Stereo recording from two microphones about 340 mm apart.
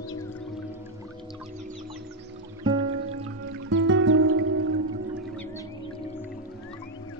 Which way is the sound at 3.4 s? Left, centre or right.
Right.